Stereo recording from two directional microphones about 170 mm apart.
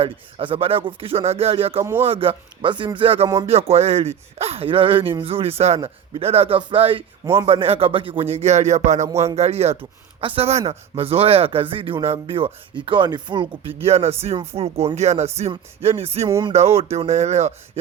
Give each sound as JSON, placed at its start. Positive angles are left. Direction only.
{"t": 0.0, "sound": "speech", "side_deg": -35}
{"t": 1.8, "sound": "speech", "side_deg": -15}
{"t": 2.0, "sound": "speech", "side_deg": -35}